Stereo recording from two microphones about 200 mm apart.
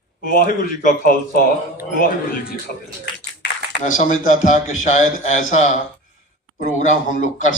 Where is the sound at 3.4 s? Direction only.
55° left (ahead or behind).